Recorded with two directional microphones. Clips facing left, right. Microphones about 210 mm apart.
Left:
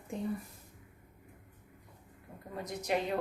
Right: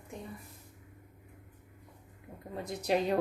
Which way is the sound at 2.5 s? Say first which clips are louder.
Right 3 dB; 30° right (ahead or behind).